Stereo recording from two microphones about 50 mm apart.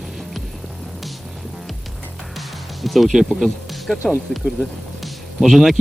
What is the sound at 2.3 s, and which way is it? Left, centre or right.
Music, centre.